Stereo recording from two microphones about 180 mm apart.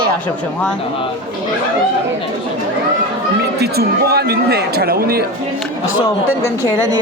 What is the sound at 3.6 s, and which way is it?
Speech, 60° right (ahead or behind).